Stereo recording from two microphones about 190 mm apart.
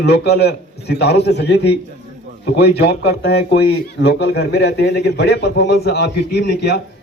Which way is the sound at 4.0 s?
65° left (ahead or behind).